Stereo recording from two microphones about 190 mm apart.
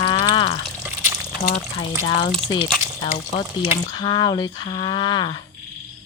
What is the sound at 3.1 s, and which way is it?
Speech, 35° left (ahead or behind).